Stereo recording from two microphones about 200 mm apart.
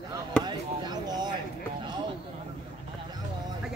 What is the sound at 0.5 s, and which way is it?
Basketball bounce, 20° right (ahead or behind).